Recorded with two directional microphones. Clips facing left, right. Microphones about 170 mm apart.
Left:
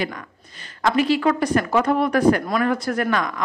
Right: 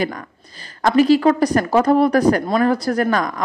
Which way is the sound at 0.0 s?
40° right (ahead or behind).